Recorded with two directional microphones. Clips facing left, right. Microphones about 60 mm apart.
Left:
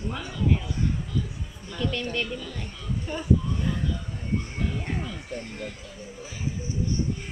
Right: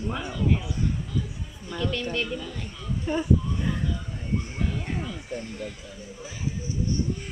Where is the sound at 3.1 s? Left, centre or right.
Right.